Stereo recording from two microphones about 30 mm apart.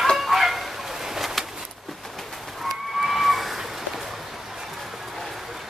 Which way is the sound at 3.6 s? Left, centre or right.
Centre.